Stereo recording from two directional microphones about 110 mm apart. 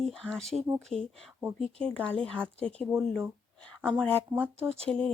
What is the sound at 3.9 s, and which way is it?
Speech, 10° left (ahead or behind).